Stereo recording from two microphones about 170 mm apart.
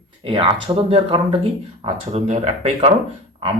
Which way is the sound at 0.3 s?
35° right (ahead or behind).